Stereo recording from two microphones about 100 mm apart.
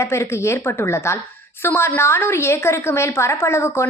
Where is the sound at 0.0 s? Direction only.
25° left (ahead or behind).